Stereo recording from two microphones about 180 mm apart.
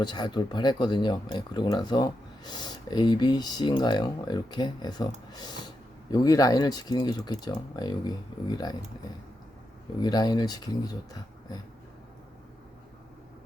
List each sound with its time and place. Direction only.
0.0 s speech: 25° left (ahead or behind)
10.0 s speech: 20° left (ahead or behind)